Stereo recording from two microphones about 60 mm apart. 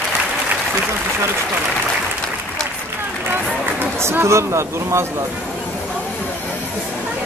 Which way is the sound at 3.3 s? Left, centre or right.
Right.